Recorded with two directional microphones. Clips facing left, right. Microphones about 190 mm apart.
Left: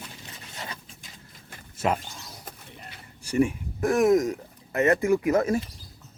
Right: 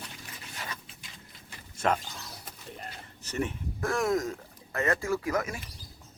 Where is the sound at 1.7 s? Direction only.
5° left (ahead or behind).